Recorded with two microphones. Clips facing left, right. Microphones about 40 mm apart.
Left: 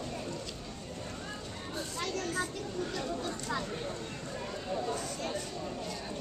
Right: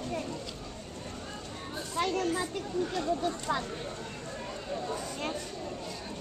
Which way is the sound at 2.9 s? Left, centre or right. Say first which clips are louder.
Right 5 dB; right.